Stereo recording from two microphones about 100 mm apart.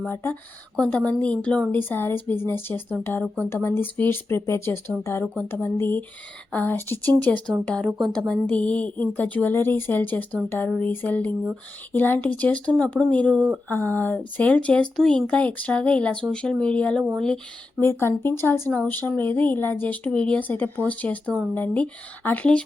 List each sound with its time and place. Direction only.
0.0 s speech: 20° left (ahead or behind)
5.2 s speech: 5° left (ahead or behind)
5.6 s speech: 25° left (ahead or behind)
13.7 s speech: 20° left (ahead or behind)
17.7 s speech: 25° left (ahead or behind)
18.7 s speech: 10° left (ahead or behind)
18.9 s speech: 20° left (ahead or behind)
20.1 s speech: 10° left (ahead or behind)